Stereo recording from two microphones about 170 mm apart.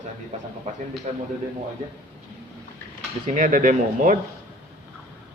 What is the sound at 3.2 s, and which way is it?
Speech, 50° right (ahead or behind).